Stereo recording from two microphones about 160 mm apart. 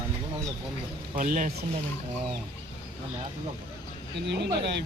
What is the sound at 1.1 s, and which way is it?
Speech, 55° right (ahead or behind).